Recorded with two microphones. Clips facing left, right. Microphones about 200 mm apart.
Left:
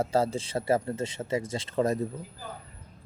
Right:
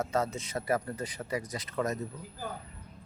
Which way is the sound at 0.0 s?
30° left (ahead or behind).